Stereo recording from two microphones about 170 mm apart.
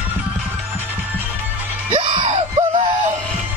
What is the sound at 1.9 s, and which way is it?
Music, 35° right (ahead or behind).